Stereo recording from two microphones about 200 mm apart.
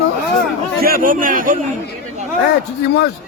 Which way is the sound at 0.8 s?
45° right (ahead or behind).